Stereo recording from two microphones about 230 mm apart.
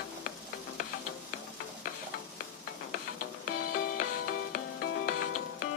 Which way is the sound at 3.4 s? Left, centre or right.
Left.